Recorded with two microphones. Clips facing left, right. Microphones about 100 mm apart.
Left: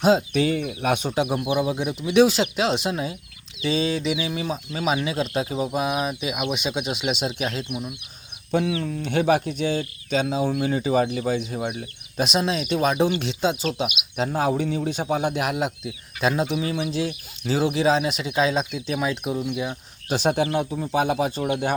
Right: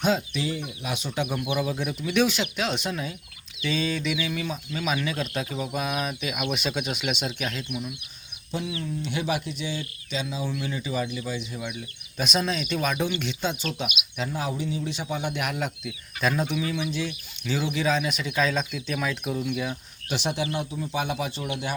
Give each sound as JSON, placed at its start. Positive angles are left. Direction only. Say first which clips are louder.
{"t": 0.0, "sound": "speech", "louder": "left 6 dB", "side_deg": 35}
{"t": 0.3, "sound": "speech", "louder": "left 8 dB", "side_deg": 60}
{"t": 1.1, "sound": "speech", "louder": "left 5 dB", "side_deg": 30}
{"t": 8.5, "sound": "speech", "louder": "left 7 dB", "side_deg": 65}
{"t": 11.0, "sound": "speech", "louder": "left 7 dB", "side_deg": 55}
{"t": 12.1, "sound": "speech", "louder": "left 4 dB", "side_deg": 25}
{"t": 14.2, "sound": "speech", "louder": "left 7 dB", "side_deg": 45}
{"t": 20.1, "sound": "speech", "louder": "left 6 dB", "side_deg": 45}